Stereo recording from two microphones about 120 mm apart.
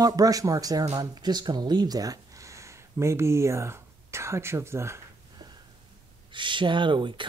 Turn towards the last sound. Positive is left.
turn(degrees=-40)  # may be behind; listen again after turning